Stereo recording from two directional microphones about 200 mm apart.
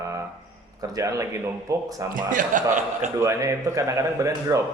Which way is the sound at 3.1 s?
15° right (ahead or behind).